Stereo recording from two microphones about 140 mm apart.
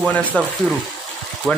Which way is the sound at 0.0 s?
10° left (ahead or behind).